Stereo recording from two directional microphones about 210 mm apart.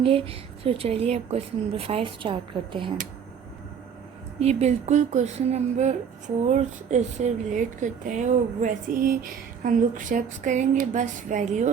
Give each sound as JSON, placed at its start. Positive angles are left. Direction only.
{"t": 0.0, "sound": "a woman's voice", "side_deg": -25}
{"t": 4.4, "sound": "speech", "side_deg": -30}